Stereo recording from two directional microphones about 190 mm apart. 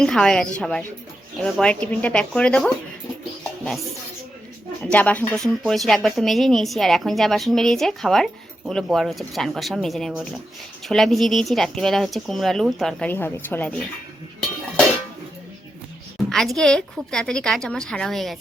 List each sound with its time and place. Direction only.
0.0 s a woman's voice: 5° left (ahead or behind)
4.8 s a woman's voice: 5° left (ahead or behind)
16.3 s a woman's voice: centre (ahead or behind)